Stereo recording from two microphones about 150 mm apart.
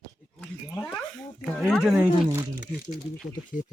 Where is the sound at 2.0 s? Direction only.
20° right (ahead or behind).